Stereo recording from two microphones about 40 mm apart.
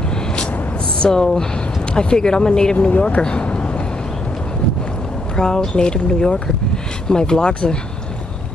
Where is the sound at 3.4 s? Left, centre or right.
Left.